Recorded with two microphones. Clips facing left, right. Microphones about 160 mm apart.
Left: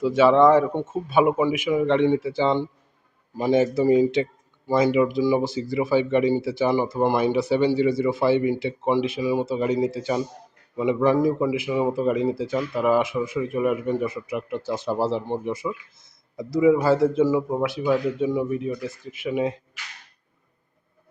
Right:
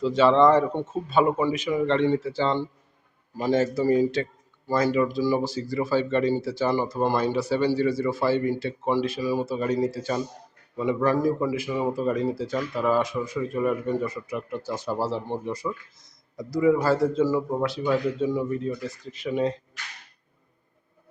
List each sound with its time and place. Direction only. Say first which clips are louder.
0.2 s a man's voice: left 2 dB; 10° left (ahead or behind)